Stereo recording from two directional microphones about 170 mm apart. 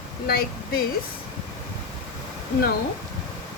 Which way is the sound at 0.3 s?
60° left (ahead or behind).